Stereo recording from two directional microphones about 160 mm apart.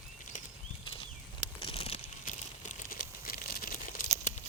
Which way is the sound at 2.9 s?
70° left (ahead or behind).